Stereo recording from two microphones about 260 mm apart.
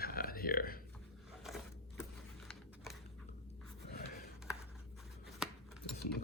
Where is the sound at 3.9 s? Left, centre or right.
Left.